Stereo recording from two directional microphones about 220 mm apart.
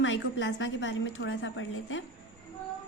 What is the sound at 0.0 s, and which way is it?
A woman's voice, 55° left (ahead or behind).